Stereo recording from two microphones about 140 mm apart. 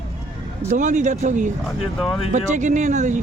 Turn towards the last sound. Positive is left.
turn(degrees=-60)  # may be behind; listen again after turning